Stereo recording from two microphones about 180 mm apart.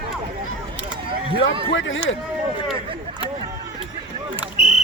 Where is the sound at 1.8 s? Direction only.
90° left.